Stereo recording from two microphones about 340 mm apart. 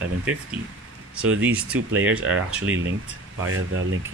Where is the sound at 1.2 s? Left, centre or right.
Centre.